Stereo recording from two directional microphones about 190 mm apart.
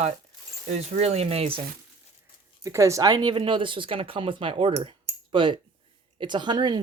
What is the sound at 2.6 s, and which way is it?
Speech, 15° right (ahead or behind).